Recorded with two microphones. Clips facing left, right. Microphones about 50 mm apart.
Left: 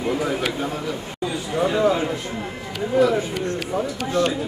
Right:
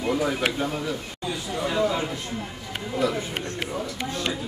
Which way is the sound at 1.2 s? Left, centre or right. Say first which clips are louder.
Left 7 dB; left.